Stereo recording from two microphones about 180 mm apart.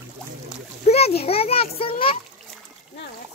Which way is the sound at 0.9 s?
35° left (ahead or behind).